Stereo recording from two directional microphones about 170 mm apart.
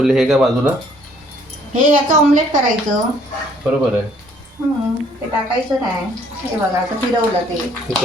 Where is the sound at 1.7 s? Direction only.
50° right (ahead or behind).